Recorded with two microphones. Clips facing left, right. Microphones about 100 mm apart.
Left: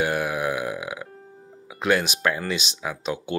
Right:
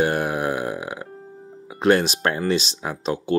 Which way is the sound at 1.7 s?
40° right (ahead or behind).